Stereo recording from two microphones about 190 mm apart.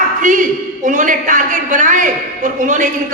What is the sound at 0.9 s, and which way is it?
A woman's voice, 45° right (ahead or behind).